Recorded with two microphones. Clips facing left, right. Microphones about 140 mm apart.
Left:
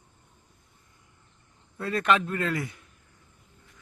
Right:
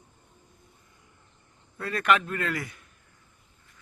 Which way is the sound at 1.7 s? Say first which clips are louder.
Even; 25° left (ahead or behind).